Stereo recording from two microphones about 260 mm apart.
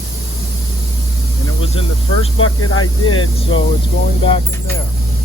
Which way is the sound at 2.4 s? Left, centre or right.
Left.